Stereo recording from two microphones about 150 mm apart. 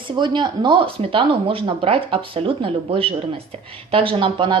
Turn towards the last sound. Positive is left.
turn(degrees=-35)  # may be behind; listen again after turning